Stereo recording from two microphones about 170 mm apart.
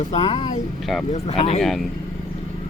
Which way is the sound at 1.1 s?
40° left (ahead or behind).